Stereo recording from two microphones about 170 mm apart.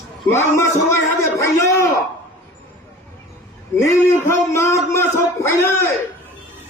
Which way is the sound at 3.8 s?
15° left (ahead or behind).